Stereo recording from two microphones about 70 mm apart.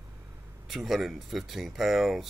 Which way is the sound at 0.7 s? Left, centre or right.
Centre.